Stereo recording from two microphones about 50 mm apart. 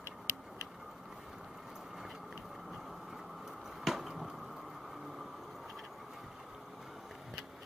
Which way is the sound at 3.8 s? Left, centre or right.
Centre.